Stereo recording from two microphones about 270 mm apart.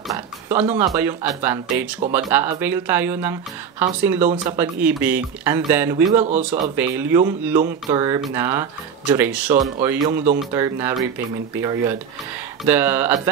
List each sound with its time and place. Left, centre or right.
0.1 s speech: centre